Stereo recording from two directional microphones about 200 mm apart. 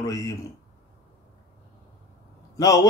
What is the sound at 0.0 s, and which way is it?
Speech, 15° left (ahead or behind).